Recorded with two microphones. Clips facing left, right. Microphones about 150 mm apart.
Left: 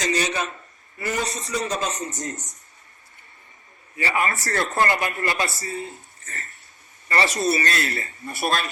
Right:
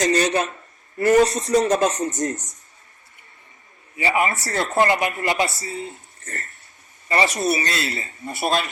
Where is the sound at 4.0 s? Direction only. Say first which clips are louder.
Right 3 dB; 20° right (ahead or behind).